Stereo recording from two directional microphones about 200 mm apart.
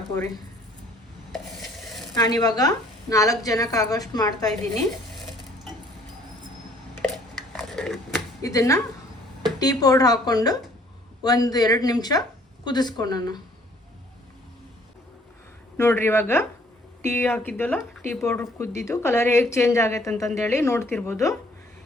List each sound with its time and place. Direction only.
2.1 s speech: 20° left (ahead or behind)
7.5 s biting: centre (ahead or behind)
8.4 s speech: 15° left (ahead or behind)
15.8 s speech: 10° left (ahead or behind)